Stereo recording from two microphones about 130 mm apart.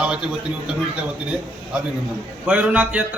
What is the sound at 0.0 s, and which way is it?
Speech, 5° right (ahead or behind).